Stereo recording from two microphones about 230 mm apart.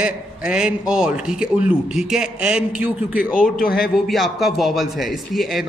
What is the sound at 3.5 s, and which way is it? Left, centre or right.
Speech, left.